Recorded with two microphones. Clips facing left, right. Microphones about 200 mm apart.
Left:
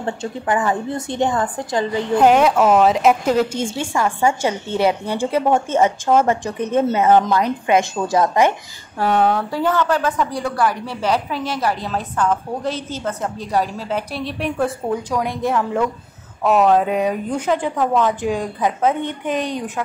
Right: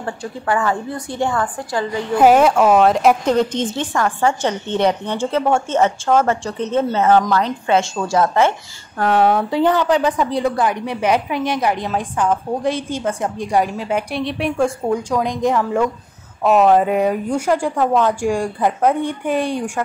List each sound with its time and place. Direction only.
0.0 s a woman's voice: 20° left (ahead or behind)
2.1 s a woman's voice: 5° right (ahead or behind); by 9.1 s 10° left (ahead or behind)
9.1 s a woman's voice: 5° right (ahead or behind)
15.0 s a woman's voice: 15° right (ahead or behind)
18.6 s a woman's voice: centre (ahead or behind)
19.0 s a woman's voice: 20° left (ahead or behind)